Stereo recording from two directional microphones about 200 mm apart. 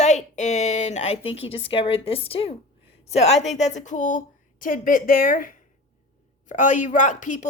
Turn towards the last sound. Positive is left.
turn(degrees=40)  # may be behind; listen again after turning